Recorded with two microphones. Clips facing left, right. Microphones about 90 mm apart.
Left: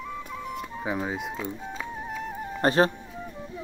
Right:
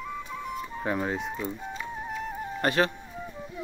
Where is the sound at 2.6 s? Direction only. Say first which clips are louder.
Left 4 dB; 35° left (ahead or behind).